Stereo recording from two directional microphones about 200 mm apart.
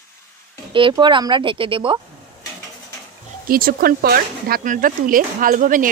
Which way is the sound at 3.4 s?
45° right (ahead or behind).